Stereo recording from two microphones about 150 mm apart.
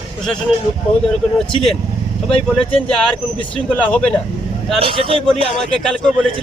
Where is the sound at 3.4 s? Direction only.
10° left (ahead or behind).